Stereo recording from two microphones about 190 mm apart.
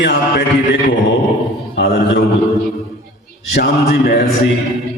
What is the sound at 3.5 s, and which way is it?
Speech, 60° left (ahead or behind).